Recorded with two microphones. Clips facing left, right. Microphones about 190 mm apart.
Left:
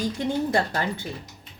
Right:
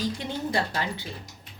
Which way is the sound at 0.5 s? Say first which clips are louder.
Left 4 dB; 50° left (ahead or behind).